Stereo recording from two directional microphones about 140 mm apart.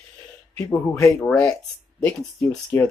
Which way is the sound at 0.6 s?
20° left (ahead or behind).